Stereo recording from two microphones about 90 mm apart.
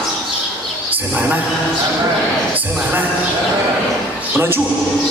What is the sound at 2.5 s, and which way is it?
Speech, 20° right (ahead or behind).